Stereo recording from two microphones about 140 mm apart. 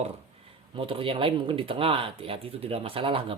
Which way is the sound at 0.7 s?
40° right (ahead or behind).